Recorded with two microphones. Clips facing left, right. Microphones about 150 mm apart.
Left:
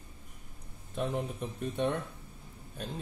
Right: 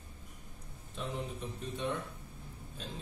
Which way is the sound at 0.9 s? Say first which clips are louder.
Left 6 dB; 55° left (ahead or behind).